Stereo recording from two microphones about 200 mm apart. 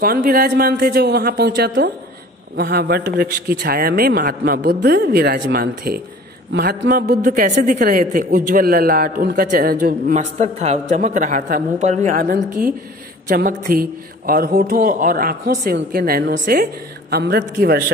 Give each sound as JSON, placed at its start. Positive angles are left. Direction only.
{"t": 0.0, "sound": "speech", "side_deg": -45}
{"t": 10.3, "sound": "a woman's voice", "side_deg": -35}